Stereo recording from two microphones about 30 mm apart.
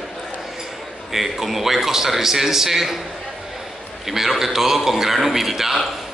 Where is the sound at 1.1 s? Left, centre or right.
Centre.